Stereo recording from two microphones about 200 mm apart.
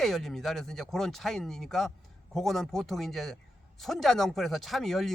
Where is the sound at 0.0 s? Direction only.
Centre (ahead or behind).